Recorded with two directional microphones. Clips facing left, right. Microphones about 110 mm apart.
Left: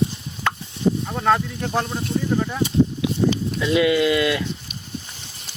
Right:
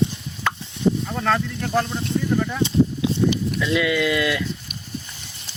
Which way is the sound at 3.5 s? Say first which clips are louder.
Left 3 dB; 30° left (ahead or behind).